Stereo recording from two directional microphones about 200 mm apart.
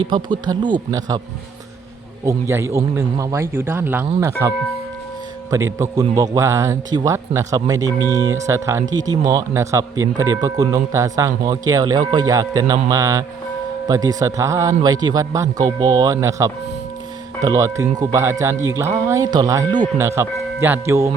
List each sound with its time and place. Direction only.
0.0 s speech: 25° right (ahead or behind)
2.2 s speech: 15° right (ahead or behind)